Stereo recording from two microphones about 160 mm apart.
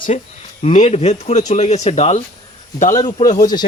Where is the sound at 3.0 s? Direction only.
30° left (ahead or behind).